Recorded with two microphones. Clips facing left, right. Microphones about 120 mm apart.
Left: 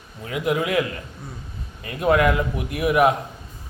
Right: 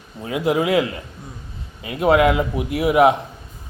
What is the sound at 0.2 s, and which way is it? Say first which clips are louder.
A man's voice: right 3 dB; 25° right (ahead or behind).